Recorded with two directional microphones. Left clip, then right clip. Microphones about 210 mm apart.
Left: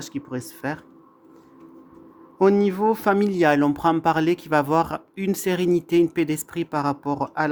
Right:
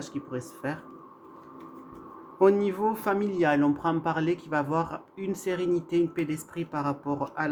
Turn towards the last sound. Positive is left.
turn(degrees=50)  # may be behind; listen again after turning